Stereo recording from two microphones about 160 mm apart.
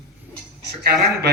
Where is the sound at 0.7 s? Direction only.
85° right.